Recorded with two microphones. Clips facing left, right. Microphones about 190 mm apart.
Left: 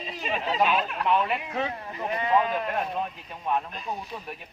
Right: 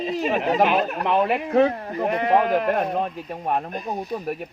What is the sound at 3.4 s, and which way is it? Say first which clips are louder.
Speech: right 3 dB; 50° right (ahead or behind).